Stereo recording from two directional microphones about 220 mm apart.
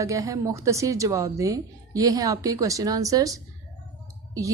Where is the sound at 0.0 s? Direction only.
15° right (ahead or behind).